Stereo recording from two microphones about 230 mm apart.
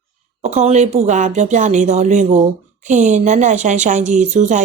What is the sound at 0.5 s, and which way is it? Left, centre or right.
Speech, right.